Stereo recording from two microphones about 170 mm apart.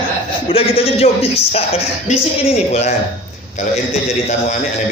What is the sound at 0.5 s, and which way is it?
Speech, 35° left (ahead or behind).